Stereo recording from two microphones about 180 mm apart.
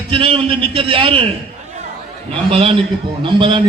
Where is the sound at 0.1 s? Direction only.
30° right (ahead or behind).